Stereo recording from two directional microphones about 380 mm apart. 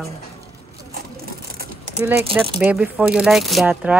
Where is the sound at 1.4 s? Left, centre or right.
Right.